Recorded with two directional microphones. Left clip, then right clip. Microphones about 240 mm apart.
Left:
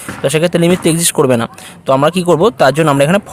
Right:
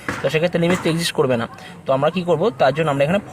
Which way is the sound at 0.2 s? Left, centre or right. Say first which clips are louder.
Left 7 dB; left.